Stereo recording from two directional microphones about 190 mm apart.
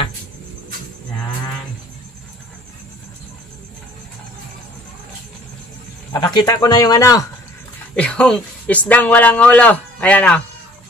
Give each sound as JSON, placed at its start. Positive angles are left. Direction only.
{"t": 6.1, "sound": "speech", "side_deg": 20}
{"t": 7.9, "sound": "speech", "side_deg": 5}